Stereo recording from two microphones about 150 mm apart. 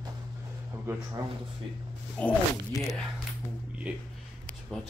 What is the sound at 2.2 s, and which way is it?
Speech, 10° left (ahead or behind).